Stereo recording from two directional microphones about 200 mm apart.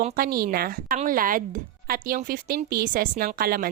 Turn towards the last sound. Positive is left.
turn(degrees=-45)  # may be behind; listen again after turning